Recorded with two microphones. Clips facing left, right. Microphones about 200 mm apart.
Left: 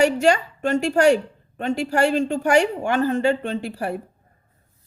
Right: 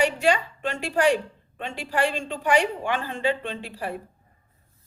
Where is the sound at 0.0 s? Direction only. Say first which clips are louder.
Left 5 dB; 45° left (ahead or behind).